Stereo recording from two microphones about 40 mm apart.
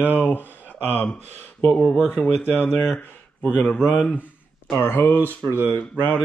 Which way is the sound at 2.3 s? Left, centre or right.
Left.